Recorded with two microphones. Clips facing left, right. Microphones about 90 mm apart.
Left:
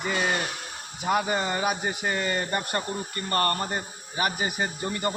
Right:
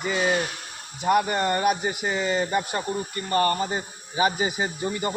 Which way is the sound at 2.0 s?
10° right (ahead or behind).